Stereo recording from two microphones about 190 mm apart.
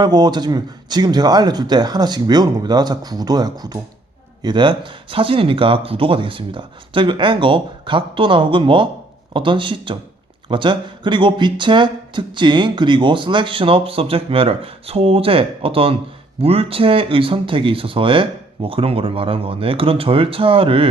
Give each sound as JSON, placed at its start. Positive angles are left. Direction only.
{"t": 0.0, "sound": "speech", "side_deg": -20}